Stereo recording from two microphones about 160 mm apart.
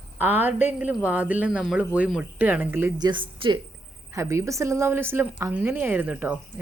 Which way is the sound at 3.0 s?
30° right (ahead or behind).